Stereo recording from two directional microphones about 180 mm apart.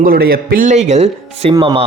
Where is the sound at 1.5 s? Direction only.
25° right (ahead or behind).